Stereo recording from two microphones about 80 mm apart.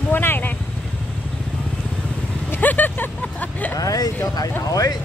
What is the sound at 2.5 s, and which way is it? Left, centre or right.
Vehicle, left.